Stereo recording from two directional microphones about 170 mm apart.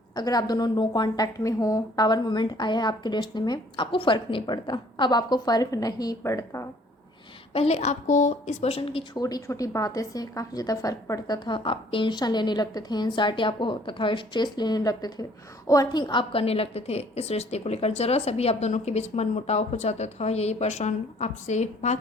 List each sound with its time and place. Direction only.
0.2 s a woman's voice: 25° left (ahead or behind)
7.5 s a woman's voice: 40° left (ahead or behind)
9.2 s a woman's voice: 20° left (ahead or behind); by 21.9 s 45° left (ahead or behind)